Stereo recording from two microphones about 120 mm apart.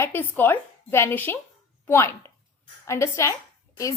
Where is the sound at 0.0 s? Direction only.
15° left (ahead or behind).